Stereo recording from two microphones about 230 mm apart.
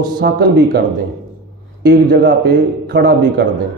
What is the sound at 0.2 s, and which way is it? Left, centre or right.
Speech, right.